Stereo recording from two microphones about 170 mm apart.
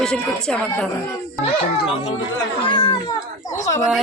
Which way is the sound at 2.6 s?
25° left (ahead or behind).